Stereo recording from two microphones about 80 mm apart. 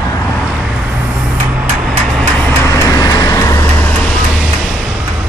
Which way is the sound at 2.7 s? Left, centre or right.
Left.